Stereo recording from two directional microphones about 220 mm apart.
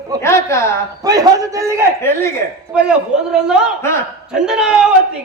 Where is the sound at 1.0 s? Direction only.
15° right (ahead or behind).